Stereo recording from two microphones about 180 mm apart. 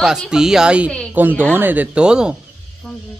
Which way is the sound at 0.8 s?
5° left (ahead or behind).